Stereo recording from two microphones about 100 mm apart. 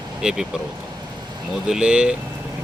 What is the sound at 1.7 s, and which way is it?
Speech, 10° right (ahead or behind).